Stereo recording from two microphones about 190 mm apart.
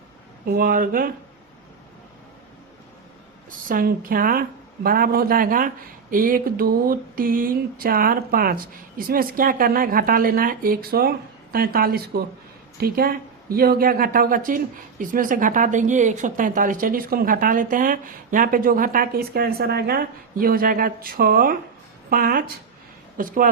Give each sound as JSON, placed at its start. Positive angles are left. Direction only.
{"t": 0.4, "sound": "speech", "side_deg": -50}
{"t": 3.7, "sound": "speech", "side_deg": -50}